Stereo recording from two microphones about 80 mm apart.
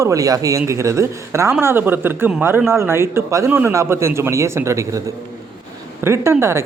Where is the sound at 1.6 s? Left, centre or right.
Right.